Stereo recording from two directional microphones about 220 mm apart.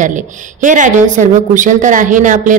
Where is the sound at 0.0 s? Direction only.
35° right (ahead or behind).